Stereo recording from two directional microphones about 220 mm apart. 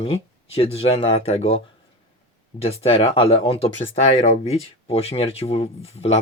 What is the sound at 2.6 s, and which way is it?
Speech, 25° left (ahead or behind).